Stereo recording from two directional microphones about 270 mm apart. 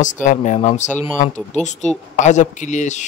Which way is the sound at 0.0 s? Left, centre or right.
Left.